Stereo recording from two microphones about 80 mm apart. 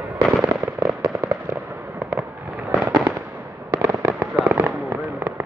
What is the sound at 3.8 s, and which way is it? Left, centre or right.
Fireworks, right.